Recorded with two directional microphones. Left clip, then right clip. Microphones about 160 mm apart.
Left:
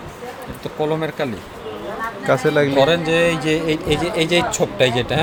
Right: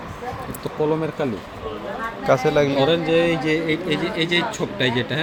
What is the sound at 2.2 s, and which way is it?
Speech, 35° left (ahead or behind).